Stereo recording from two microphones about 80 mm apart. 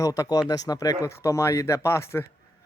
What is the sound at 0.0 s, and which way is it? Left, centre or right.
Speech, left.